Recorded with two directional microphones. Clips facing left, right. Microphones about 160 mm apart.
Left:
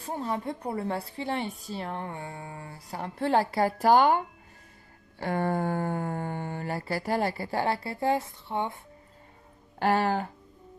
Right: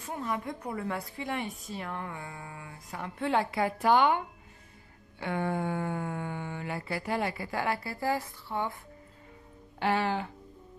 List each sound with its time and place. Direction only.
0.0 s a woman's voice: 30° left (ahead or behind)
5.2 s a woman's voice: 40° left (ahead or behind); by 8.7 s 25° left (ahead or behind)
9.8 s speech: 45° left (ahead or behind)